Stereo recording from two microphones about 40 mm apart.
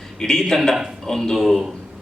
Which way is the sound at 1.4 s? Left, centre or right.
Centre.